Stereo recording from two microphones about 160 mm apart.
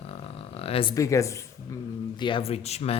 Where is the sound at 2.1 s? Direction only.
30° left (ahead or behind).